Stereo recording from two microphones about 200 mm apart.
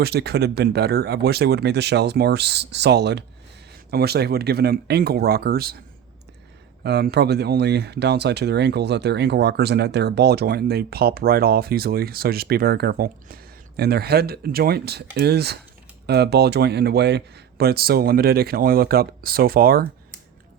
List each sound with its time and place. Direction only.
0.0 s speech: 55° right (ahead or behind)
6.8 s speech: 55° right (ahead or behind)